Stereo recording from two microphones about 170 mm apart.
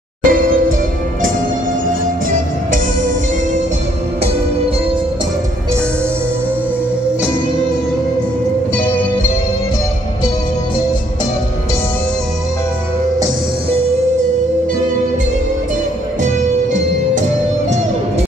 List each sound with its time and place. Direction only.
0.2 s music: 55° right (ahead or behind)